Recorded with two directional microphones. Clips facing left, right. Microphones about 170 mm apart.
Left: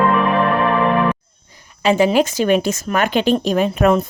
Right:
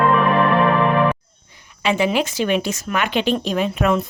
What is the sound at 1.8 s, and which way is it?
Speech, 40° left (ahead or behind).